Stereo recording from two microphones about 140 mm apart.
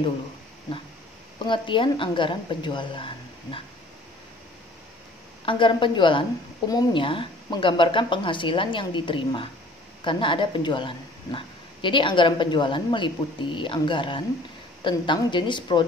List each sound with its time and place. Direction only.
1.4 s speech: 35° left (ahead or behind)
5.4 s speech: 35° left (ahead or behind)